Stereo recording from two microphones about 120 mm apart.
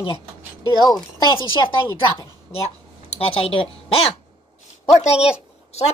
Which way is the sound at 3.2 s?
55° left (ahead or behind).